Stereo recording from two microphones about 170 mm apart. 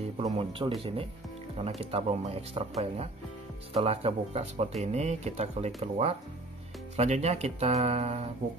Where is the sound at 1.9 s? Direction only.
35° right (ahead or behind).